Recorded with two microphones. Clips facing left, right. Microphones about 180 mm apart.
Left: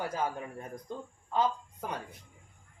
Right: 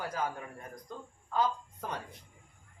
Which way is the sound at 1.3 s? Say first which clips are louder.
Left 1 dB; 15° left (ahead or behind).